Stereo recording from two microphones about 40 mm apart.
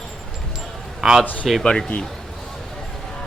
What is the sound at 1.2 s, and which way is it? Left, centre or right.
Speech, left.